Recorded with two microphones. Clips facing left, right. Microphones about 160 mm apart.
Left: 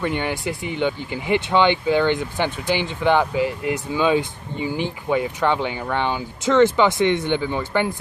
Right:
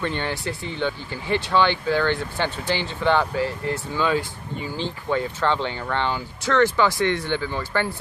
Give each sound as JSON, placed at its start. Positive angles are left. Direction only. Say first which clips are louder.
{"t": 0.0, "sound": "speech", "louder": "left 3 dB", "side_deg": 15}